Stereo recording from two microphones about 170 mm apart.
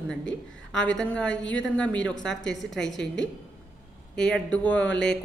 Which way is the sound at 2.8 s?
90° left.